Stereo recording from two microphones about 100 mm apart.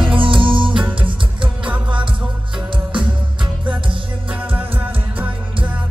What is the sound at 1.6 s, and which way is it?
Music, 15° right (ahead or behind).